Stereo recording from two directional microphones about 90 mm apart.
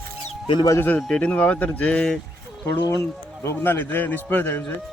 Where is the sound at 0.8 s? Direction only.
20° left (ahead or behind).